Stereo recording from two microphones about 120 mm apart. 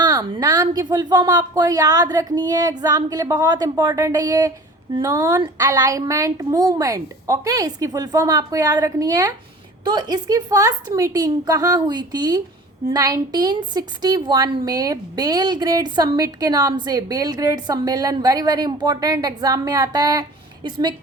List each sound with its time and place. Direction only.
0.0 s a woman's voice: 30° right (ahead or behind)